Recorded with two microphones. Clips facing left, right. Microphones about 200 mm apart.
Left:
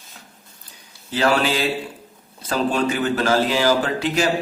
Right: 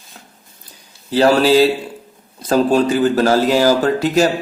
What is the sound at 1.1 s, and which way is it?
A man's voice, 35° right (ahead or behind).